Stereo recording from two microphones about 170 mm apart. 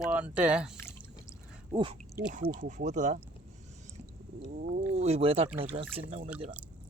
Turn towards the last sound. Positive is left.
turn(degrees=-35)  # may be behind; listen again after turning